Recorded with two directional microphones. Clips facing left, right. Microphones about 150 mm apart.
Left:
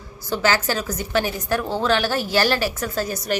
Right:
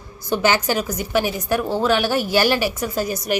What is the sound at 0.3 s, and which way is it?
A woman's voice, 15° right (ahead or behind).